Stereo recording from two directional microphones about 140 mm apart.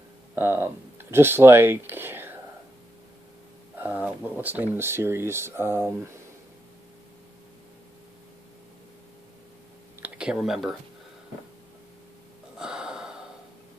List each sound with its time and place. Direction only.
0.4 s speech: 15° right (ahead or behind)
3.7 s speech: 15° right (ahead or behind)
9.9 s a sound: 10° right (ahead or behind)
12.5 s gasp: 5° right (ahead or behind)